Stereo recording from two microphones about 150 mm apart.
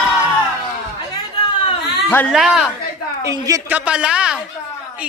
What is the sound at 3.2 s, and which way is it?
Speech, 25° right (ahead or behind).